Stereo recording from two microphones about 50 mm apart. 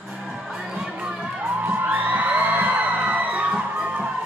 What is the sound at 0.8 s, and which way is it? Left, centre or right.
Crowd, centre.